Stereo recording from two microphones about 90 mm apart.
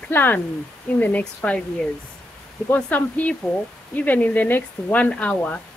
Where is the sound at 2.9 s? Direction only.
20° left (ahead or behind).